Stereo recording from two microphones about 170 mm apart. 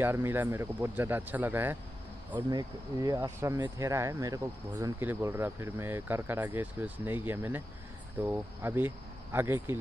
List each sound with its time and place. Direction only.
0.0 s speech: 15° right (ahead or behind)
2.3 s speech: 25° right (ahead or behind)